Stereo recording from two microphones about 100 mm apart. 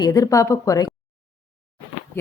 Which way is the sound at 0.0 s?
40° left (ahead or behind).